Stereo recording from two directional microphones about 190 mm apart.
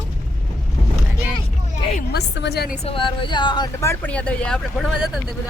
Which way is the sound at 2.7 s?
30° left (ahead or behind).